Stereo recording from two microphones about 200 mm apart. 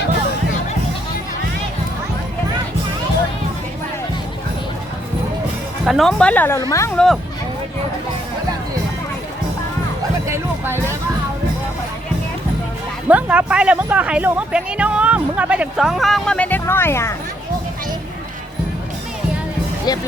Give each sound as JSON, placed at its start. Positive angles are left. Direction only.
{"t": 5.8, "sound": "speech", "side_deg": 0}
{"t": 6.9, "sound": "speech", "side_deg": 0}
{"t": 10.2, "sound": "music", "side_deg": -15}
{"t": 13.1, "sound": "speech", "side_deg": -5}